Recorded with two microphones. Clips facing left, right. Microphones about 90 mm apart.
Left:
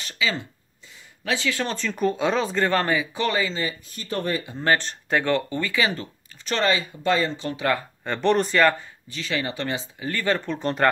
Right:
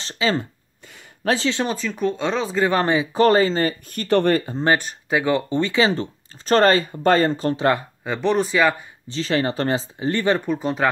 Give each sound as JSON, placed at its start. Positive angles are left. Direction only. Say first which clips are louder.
{"t": 0.0, "sound": "speech", "louder": "right 5 dB", "side_deg": -35}
{"t": 1.7, "sound": "speech", "louder": "right 1 dB", "side_deg": -5}
{"t": 2.8, "sound": "speech", "louder": "right 4 dB", "side_deg": -25}
{"t": 3.2, "sound": "speech", "louder": "right 9 dB", "side_deg": -40}
{"t": 4.7, "sound": "speech", "louder": "right 2 dB", "side_deg": -10}
{"t": 6.5, "sound": "speech", "louder": "right 7 dB", "side_deg": -45}
{"t": 8.0, "sound": "speech", "louder": "left 2 dB", "side_deg": -5}
{"t": 9.1, "sound": "speech", "louder": "right 7 dB", "side_deg": -35}